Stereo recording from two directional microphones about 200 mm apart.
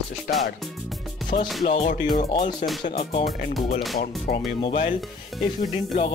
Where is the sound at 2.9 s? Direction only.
30° left (ahead or behind).